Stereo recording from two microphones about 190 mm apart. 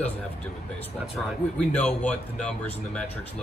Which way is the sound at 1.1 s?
5° left (ahead or behind).